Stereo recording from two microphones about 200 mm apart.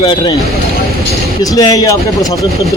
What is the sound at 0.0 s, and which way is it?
Speech, 25° left (ahead or behind).